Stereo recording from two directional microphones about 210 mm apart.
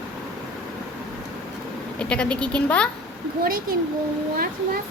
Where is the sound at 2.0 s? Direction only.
5° left (ahead or behind).